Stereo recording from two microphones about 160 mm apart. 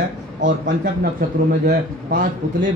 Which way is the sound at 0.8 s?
65° right (ahead or behind).